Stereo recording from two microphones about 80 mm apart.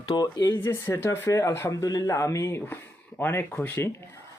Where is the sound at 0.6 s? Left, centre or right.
Left.